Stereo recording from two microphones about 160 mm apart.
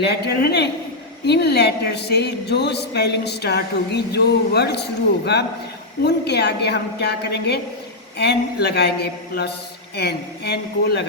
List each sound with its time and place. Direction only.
0.0 s a woman's voice: 90° left